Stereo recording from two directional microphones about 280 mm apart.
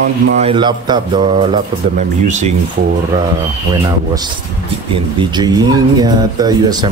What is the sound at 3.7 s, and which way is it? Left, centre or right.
Speech, centre.